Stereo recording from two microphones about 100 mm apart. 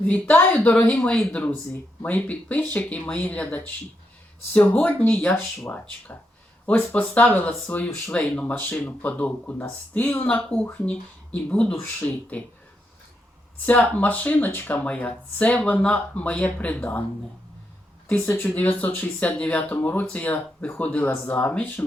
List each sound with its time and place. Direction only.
0.0 s speech: 15° left (ahead or behind)
13.7 s speech: 15° left (ahead or behind)
18.3 s speech: 20° left (ahead or behind)